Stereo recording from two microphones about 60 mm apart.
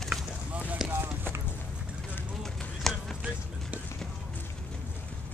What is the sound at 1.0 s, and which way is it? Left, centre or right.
Run, right.